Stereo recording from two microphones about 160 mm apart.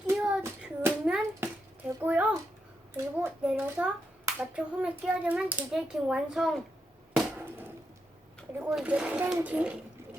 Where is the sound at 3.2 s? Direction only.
10° right (ahead or behind).